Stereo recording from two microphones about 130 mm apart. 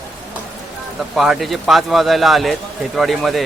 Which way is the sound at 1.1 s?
Centre (ahead or behind).